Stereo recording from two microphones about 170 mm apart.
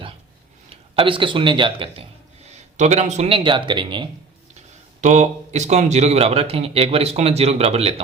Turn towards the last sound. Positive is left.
turn(degrees=-35)  # may be behind; listen again after turning